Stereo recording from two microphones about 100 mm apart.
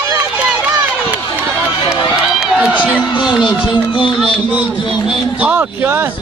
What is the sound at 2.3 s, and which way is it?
Run, 5° right (ahead or behind).